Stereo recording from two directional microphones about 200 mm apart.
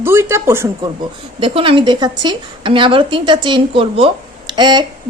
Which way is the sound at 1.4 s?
25° right (ahead or behind).